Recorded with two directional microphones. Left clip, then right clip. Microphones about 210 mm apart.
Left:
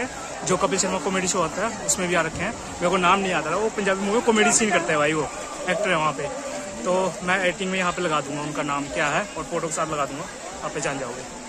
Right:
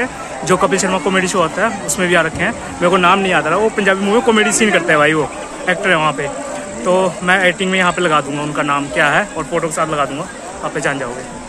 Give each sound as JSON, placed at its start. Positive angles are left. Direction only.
{"t": 0.0, "sound": "speech", "side_deg": -10}